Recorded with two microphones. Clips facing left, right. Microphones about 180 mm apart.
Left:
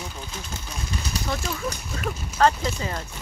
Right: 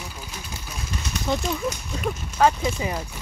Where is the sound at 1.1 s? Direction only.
35° left (ahead or behind).